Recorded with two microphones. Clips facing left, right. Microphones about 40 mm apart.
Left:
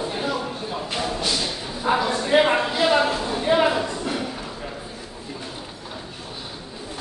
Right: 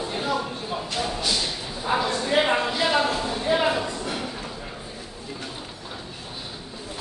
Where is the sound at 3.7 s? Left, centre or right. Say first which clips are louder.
Left 2 dB; centre.